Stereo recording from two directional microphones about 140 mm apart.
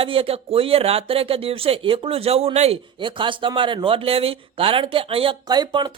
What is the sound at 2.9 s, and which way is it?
Speech, 35° right (ahead or behind).